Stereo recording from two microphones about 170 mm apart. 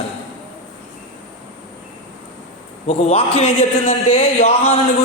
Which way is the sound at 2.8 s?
35° left (ahead or behind).